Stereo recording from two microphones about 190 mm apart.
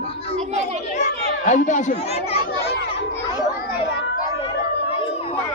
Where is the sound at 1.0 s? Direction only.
40° left (ahead or behind).